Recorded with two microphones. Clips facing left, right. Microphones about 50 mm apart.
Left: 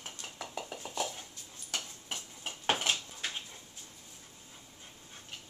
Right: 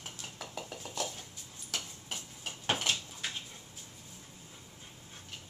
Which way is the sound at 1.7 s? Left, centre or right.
Centre.